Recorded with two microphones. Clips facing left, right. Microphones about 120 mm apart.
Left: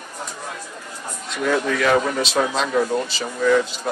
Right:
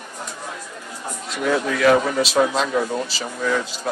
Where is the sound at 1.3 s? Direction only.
5° right (ahead or behind).